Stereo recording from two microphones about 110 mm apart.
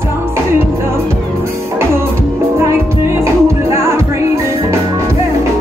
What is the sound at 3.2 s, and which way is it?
Music, 25° right (ahead or behind).